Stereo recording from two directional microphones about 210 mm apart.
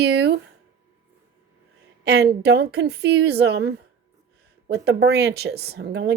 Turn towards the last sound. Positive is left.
turn(degrees=-55)  # may be behind; listen again after turning